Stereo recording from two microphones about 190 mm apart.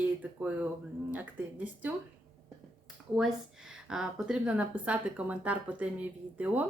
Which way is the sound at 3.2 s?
Centre (ahead or behind).